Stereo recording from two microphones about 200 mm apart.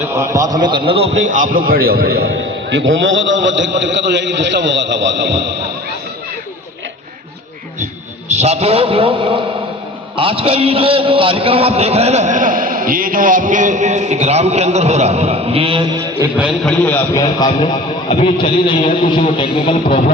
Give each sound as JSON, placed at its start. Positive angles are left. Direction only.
{"t": 0.0, "sound": "a man's voice", "side_deg": -15}
{"t": 8.3, "sound": "a man's voice", "side_deg": -35}
{"t": 16.6, "sound": "a man's voice", "side_deg": 10}